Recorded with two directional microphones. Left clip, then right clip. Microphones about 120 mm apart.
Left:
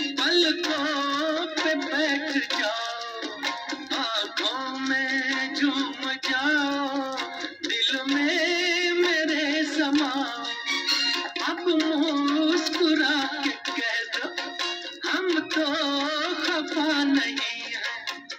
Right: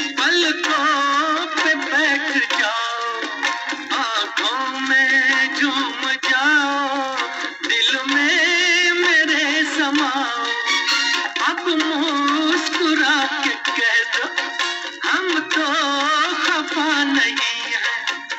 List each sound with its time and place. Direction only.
0.2 s music: 40° left (ahead or behind)